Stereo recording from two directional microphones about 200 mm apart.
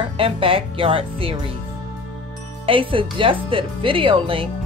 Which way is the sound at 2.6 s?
25° right (ahead or behind).